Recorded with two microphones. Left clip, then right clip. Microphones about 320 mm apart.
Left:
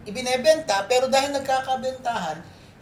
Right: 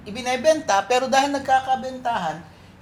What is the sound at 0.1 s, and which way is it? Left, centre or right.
Speech, right.